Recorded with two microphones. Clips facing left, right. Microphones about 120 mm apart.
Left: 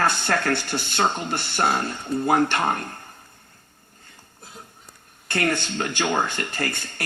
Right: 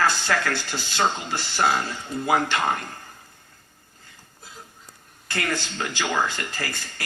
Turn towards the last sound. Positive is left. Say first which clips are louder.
# left 4 dB
turn(degrees=60)  # may be behind; listen again after turning